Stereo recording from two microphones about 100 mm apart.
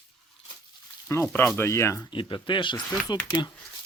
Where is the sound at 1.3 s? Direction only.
20° left (ahead or behind).